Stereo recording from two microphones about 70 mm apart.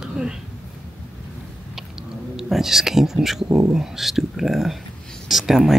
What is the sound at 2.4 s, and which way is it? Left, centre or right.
Speech, centre.